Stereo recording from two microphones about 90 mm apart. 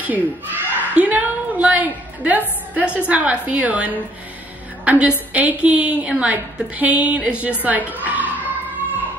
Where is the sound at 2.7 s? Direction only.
15° right (ahead or behind).